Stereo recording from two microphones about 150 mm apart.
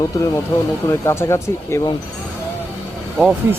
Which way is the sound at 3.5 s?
15° right (ahead or behind).